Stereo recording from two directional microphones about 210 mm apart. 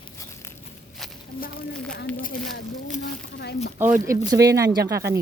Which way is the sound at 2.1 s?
40° left (ahead or behind).